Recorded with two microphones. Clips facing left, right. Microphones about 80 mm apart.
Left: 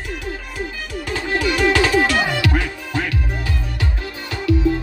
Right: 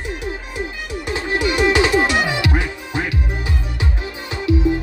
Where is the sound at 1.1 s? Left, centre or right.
Centre.